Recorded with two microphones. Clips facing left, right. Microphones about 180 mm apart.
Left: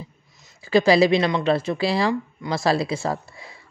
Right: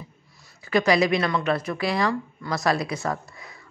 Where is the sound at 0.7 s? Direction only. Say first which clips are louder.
Left 4 dB; 30° left (ahead or behind).